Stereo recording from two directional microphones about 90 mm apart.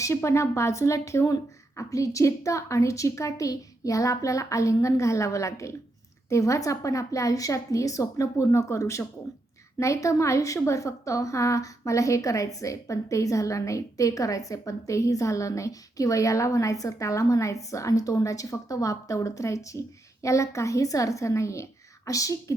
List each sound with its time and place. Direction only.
0.0 s a woman's voice: 30° left (ahead or behind)